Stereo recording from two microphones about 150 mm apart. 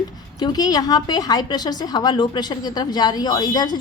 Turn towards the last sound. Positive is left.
turn(degrees=25)  # may be behind; listen again after turning